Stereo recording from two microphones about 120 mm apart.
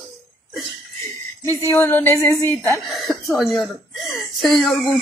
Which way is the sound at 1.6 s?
20° left (ahead or behind).